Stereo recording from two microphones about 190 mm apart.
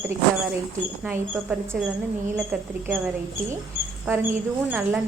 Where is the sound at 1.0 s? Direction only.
10° right (ahead or behind).